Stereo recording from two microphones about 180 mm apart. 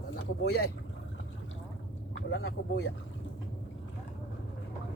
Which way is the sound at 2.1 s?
70° left (ahead or behind).